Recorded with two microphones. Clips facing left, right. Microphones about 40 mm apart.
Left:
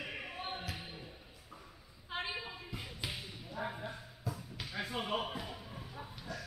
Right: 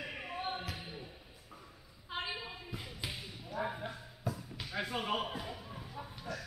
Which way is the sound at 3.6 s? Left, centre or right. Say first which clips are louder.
Right 1 dB; centre.